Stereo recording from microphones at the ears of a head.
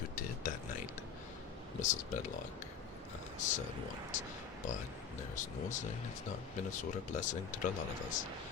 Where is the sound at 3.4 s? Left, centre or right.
Left.